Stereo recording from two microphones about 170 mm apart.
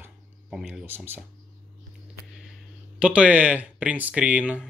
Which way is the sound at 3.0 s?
5° right (ahead or behind).